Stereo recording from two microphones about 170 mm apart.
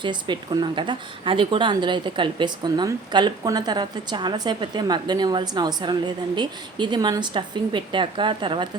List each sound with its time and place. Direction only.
0.0 s a woman's voice: 25° right (ahead or behind)